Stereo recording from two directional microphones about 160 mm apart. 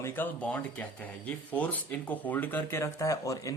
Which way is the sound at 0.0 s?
10° left (ahead or behind).